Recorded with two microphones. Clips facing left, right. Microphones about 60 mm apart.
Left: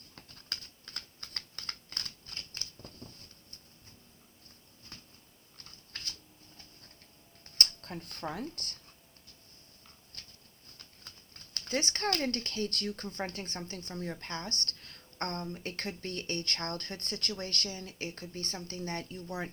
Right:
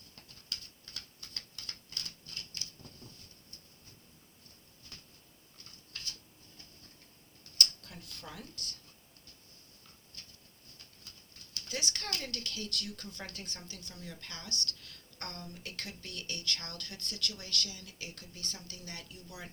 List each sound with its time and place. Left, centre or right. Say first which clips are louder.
0.3 s typing: left 3 dB; left
7.6 s speech: left 1 dB; left
11.5 s speech: left 6 dB; left